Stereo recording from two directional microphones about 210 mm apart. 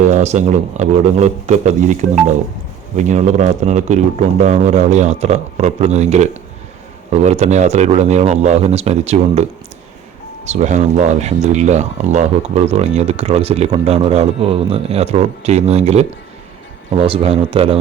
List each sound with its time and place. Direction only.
0.0 s speech: 35° right (ahead or behind)